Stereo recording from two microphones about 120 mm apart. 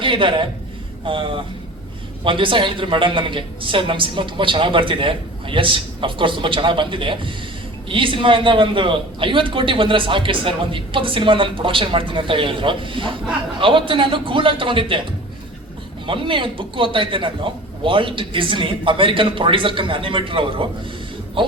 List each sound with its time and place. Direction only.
0.0 s a man's voice: 45° right (ahead or behind)
16.0 s a man's voice: 45° right (ahead or behind)